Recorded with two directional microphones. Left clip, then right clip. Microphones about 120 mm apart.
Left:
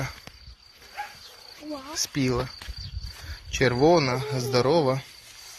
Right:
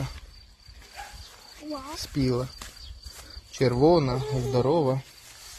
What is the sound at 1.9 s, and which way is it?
Speech, 15° right (ahead or behind).